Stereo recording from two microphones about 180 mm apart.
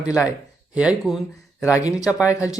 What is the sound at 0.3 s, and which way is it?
Speech, 5° right (ahead or behind).